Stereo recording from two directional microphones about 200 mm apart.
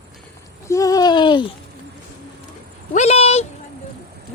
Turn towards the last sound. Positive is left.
turn(degrees=30)  # may be behind; listen again after turning